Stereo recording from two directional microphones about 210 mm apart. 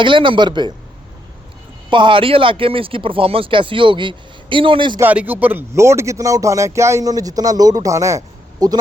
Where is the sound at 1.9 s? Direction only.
25° right (ahead or behind).